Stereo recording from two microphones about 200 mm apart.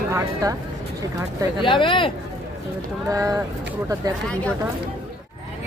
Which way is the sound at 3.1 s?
15° right (ahead or behind).